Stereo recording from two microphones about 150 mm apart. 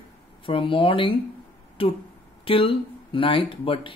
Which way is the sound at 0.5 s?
35° left (ahead or behind).